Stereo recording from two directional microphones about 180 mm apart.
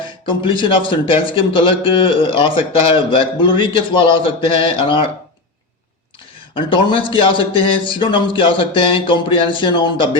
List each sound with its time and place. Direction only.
0.0 s a man's voice: 25° left (ahead or behind)
6.5 s a man's voice: 30° left (ahead or behind)